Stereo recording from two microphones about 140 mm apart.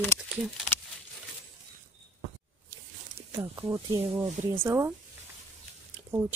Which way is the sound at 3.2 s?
45° right (ahead or behind).